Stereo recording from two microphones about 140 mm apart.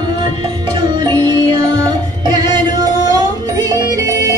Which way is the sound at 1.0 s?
35° right (ahead or behind).